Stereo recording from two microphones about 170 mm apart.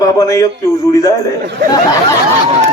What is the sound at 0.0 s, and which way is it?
A man's voice, 20° left (ahead or behind).